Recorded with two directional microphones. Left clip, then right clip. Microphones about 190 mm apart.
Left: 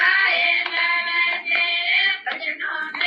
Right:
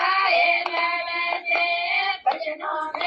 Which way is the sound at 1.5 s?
Centre (ahead or behind).